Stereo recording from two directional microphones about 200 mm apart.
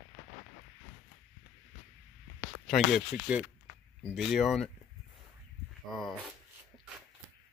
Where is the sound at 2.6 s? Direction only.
Centre (ahead or behind).